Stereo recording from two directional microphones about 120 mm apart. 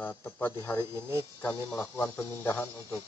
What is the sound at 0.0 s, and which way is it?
Speech, 15° left (ahead or behind).